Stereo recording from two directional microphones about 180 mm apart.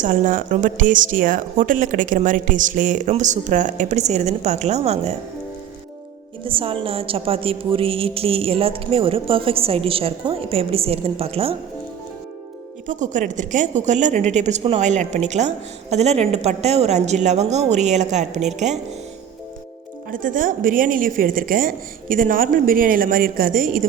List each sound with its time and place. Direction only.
0.0 s a woman's voice: 45° right (ahead or behind)
6.4 s a woman's voice: 30° right (ahead or behind)
12.9 s a woman's voice: 45° right (ahead or behind)
20.1 s a woman's voice: 50° right (ahead or behind)